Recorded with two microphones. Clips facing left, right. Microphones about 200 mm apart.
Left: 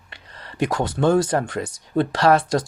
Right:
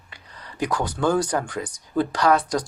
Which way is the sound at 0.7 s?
25° left (ahead or behind).